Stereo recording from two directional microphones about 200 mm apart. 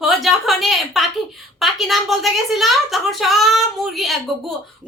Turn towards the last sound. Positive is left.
turn(degrees=0)  # may be behind; listen again after turning